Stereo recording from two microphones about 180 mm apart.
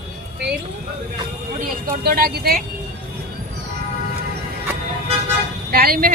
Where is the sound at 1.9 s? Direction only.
55° right (ahead or behind).